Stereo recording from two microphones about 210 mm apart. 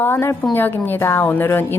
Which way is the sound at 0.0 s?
10° left (ahead or behind).